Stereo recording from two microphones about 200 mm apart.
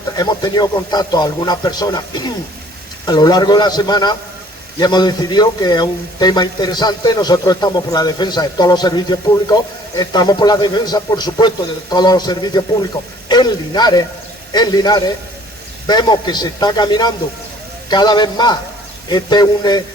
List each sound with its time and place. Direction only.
0.2 s speech: 20° left (ahead or behind)